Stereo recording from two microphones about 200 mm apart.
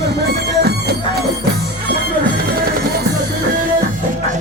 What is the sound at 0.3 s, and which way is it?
Music, 55° right (ahead or behind).